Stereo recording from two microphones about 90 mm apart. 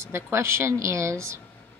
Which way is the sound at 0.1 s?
30° right (ahead or behind).